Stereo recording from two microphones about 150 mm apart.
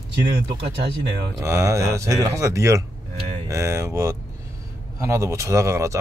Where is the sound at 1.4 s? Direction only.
20° right (ahead or behind).